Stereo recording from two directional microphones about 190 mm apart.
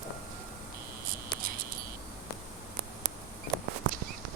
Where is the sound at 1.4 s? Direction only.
50° right (ahead or behind).